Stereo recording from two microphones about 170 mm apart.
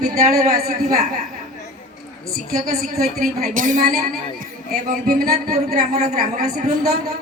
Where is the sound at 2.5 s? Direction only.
60° right (ahead or behind).